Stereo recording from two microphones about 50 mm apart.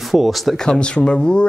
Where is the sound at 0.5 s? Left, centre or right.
Centre.